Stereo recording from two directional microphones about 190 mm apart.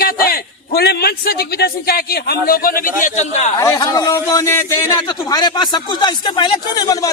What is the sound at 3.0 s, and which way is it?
Speech, 40° left (ahead or behind).